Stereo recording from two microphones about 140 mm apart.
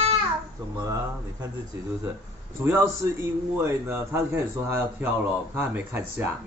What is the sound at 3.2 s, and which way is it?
A man's voice, 15° right (ahead or behind).